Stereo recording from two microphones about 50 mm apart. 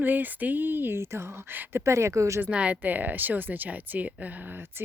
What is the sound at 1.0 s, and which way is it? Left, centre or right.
Speech, right.